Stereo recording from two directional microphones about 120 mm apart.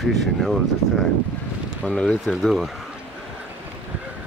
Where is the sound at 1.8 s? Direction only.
5° left (ahead or behind).